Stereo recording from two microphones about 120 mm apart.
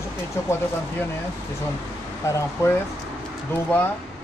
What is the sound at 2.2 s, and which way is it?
Speech, 20° left (ahead or behind).